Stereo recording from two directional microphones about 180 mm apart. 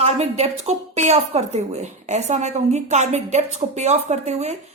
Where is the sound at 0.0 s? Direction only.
35° right (ahead or behind).